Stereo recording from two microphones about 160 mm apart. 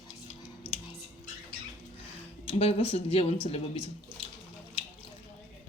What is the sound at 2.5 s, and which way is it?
Speech, 40° left (ahead or behind).